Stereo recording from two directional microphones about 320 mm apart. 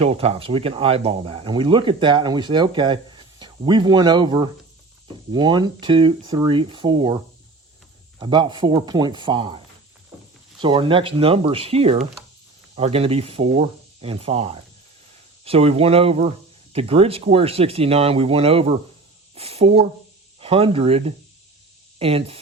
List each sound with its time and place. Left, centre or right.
0.0 s speech: centre
8.2 s speech: centre
10.6 s speech: centre